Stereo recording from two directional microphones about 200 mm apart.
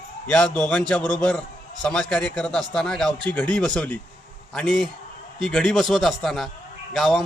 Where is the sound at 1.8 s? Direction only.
5° left (ahead or behind).